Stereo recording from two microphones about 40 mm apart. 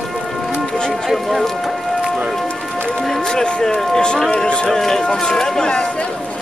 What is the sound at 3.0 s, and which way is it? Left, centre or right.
Music, centre.